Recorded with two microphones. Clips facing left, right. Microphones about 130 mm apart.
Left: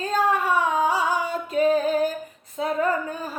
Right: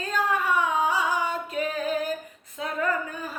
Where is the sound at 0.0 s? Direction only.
35° left (ahead or behind).